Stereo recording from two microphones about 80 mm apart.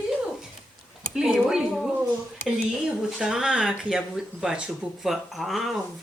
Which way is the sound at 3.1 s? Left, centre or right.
Centre.